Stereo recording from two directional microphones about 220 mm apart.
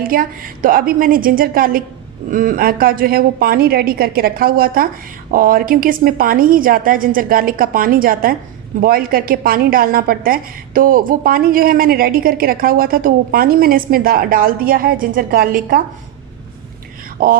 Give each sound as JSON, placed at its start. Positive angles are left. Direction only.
{"t": 0.0, "sound": "a woman's voice", "side_deg": -40}
{"t": 17.2, "sound": "a woman's voice", "side_deg": -40}